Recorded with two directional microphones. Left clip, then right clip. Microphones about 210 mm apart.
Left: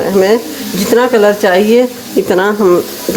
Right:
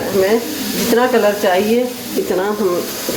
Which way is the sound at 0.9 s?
50° left (ahead or behind).